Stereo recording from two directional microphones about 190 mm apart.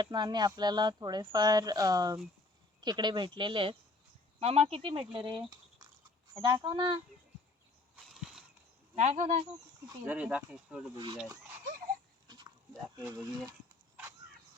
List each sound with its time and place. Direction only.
0.0 s speech: 25° right (ahead or behind)
8.0 s a sound: centre (ahead or behind)
9.0 s speech: 35° right (ahead or behind)
10.1 s speech: 10° right (ahead or behind)
10.9 s speech: 20° right (ahead or behind)
12.3 s dog: 20° right (ahead or behind)